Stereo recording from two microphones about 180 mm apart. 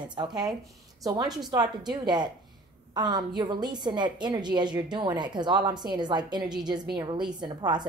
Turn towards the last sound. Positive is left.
turn(degrees=-25)  # may be behind; listen again after turning